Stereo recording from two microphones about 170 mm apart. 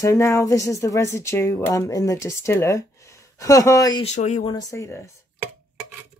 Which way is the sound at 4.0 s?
40° left (ahead or behind).